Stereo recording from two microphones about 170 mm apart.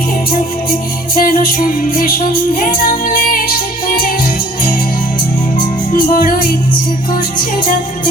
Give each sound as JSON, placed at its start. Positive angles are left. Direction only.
{"t": 1.1, "sound": "music", "side_deg": 55}
{"t": 5.9, "sound": "music", "side_deg": 55}